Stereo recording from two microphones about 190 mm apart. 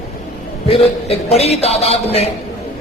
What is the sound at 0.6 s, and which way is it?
Speech, 30° left (ahead or behind).